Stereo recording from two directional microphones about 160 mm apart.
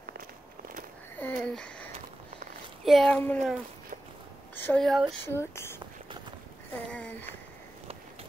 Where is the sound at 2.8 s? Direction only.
Centre (ahead or behind).